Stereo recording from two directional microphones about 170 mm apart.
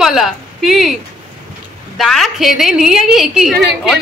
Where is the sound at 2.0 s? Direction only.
Centre (ahead or behind).